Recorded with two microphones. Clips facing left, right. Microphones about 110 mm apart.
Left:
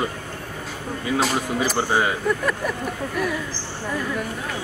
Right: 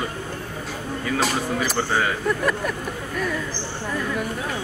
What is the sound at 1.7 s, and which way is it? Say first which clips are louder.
Speech: left 2 dB; 20° left (ahead or behind).